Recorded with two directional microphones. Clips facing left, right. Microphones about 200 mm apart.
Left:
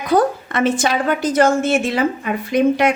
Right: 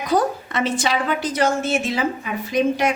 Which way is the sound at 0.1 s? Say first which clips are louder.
Left 4 dB; 55° left (ahead or behind).